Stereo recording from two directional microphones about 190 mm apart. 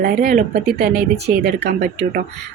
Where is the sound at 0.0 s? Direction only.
45° right (ahead or behind).